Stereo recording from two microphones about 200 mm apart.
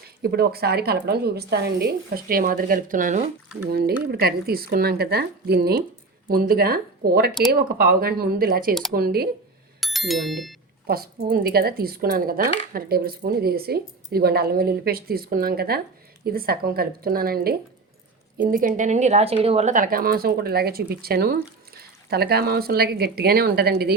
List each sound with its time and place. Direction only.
0.2 s speech: 55° right (ahead or behind)
9.8 s speech: centre (ahead or behind)
10.8 s speech: 50° right (ahead or behind)